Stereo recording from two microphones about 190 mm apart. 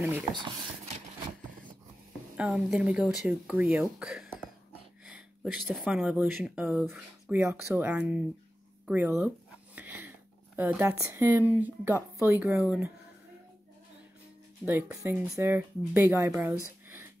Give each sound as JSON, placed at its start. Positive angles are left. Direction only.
{"t": 0.2, "sound": "speech", "side_deg": -25}
{"t": 2.3, "sound": "speech", "side_deg": -5}
{"t": 9.8, "sound": "a sound", "side_deg": -10}
{"t": 12.2, "sound": "speech", "side_deg": -10}
{"t": 14.6, "sound": "speech", "side_deg": -10}